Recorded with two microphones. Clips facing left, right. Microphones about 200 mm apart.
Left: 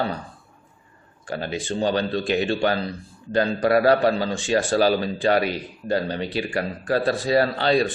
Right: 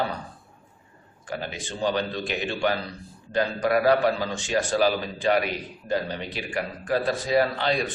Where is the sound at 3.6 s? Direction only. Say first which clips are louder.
Left 3 dB; 35° left (ahead or behind).